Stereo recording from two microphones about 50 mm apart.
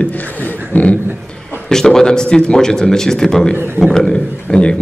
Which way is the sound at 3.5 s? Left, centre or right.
Right.